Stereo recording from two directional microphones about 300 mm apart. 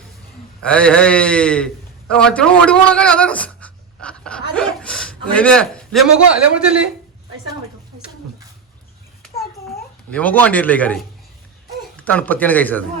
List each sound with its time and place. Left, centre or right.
0.6 s a man's voice: centre
10.1 s a man's voice: centre